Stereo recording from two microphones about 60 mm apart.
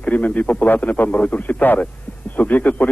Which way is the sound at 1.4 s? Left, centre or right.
Left.